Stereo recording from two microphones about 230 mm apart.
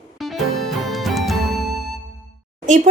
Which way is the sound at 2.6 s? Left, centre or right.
Right.